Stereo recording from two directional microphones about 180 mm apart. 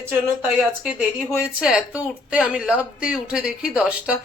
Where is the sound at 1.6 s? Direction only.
5° right (ahead or behind).